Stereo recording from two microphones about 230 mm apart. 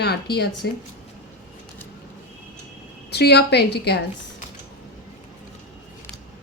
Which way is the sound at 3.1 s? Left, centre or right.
Left.